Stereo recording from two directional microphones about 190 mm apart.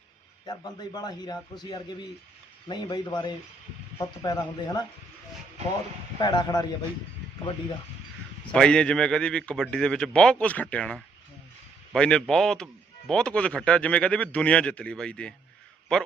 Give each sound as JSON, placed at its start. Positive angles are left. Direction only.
{"t": 0.4, "sound": "a man's voice", "side_deg": 20}
{"t": 6.1, "sound": "a man's voice", "side_deg": 20}
{"t": 8.5, "sound": "a man's voice", "side_deg": 5}